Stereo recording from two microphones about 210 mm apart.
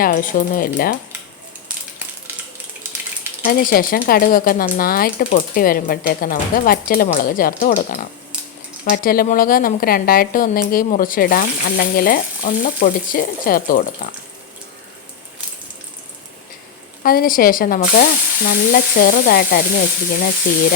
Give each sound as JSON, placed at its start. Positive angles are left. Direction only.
{"t": 0.0, "sound": "speech", "side_deg": 40}
{"t": 3.4, "sound": "speech", "side_deg": 40}
{"t": 17.0, "sound": "speech", "side_deg": 45}